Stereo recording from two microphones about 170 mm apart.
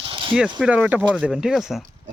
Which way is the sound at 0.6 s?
5° right (ahead or behind).